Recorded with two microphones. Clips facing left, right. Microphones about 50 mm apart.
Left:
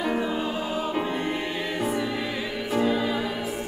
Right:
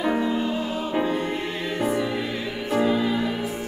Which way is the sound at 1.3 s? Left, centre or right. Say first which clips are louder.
Right 1 dB; centre.